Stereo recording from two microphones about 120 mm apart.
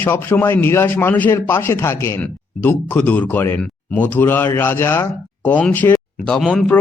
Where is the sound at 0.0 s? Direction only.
15° left (ahead or behind).